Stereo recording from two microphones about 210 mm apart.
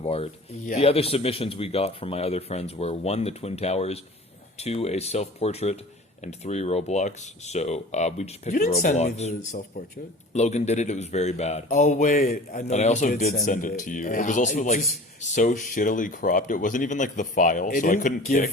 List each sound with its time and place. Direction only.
0.0 s a man's voice: 25° left (ahead or behind)